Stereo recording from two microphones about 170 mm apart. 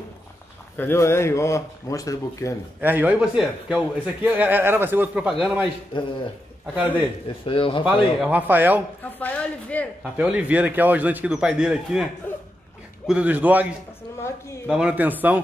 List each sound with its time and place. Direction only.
0.7 s speech: 15° left (ahead or behind)
2.8 s a man's voice: 10° right (ahead or behind)
6.7 s a man's voice: 10° right (ahead or behind)
7.2 s speech: 30° left (ahead or behind)
7.8 s a man's voice: 10° right (ahead or behind)
9.0 s a woman's voice: 10° left (ahead or behind)
10.1 s a man's voice: 10° right (ahead or behind)
14.7 s a man's voice: 5° right (ahead or behind)